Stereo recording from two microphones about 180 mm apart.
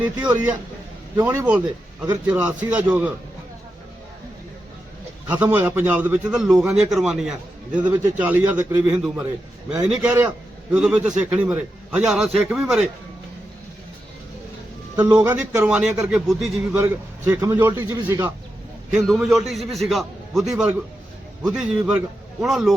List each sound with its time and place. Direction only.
0.0 s a man's voice: 5° right (ahead or behind)
5.3 s a man's voice: 10° right (ahead or behind)
7.8 s speech: 25° right (ahead or behind)
8.2 s a man's voice: 10° right (ahead or behind)
15.0 s a man's voice: 10° right (ahead or behind)
16.7 s a man's voice: 10° right (ahead or behind)
19.0 s a man's voice: centre (ahead or behind)